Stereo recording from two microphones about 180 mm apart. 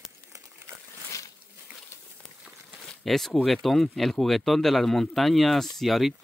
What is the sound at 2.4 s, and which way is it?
Speech, centre (ahead or behind).